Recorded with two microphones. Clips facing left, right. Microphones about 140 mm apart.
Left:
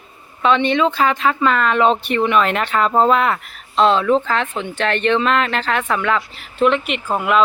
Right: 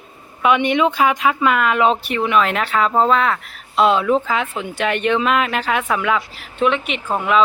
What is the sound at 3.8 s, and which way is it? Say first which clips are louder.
Speech: left 1 dB; 10° right (ahead or behind).